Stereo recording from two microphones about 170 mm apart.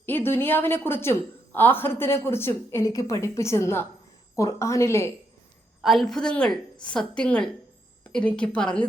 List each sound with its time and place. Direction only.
0.0 s a woman's voice: 10° left (ahead or behind)
5.8 s a woman's voice: centre (ahead or behind)